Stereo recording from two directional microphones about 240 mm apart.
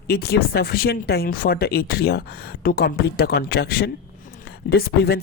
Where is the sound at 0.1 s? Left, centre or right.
Left.